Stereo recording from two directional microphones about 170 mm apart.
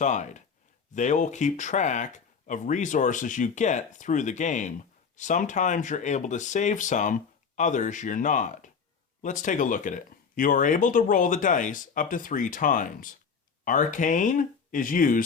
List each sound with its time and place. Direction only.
0.0 s speech: 45° left (ahead or behind)